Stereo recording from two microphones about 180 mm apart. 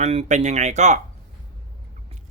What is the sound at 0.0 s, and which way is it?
Speech, 35° right (ahead or behind).